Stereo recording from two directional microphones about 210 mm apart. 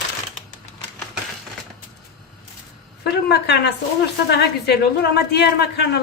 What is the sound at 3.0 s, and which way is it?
A woman's voice, 50° left (ahead or behind).